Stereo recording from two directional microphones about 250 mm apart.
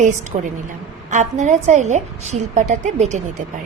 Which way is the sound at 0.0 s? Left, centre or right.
Right.